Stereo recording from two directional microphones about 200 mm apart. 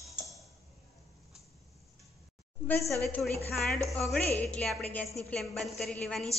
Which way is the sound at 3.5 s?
Centre (ahead or behind).